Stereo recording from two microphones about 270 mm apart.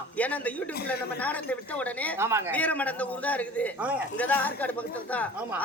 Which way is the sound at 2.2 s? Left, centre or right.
Centre.